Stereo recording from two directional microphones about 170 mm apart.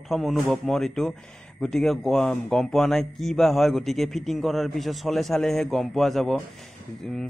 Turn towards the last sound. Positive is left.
turn(degrees=0)  # may be behind; listen again after turning